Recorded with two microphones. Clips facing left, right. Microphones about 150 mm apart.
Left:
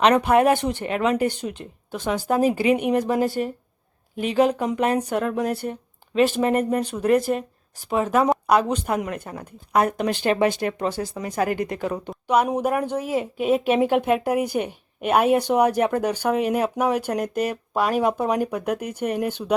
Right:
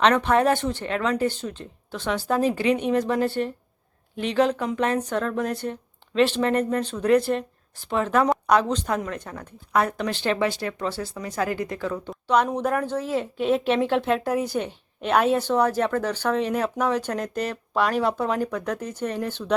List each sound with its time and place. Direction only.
0.0 s a woman's voice: 10° left (ahead or behind)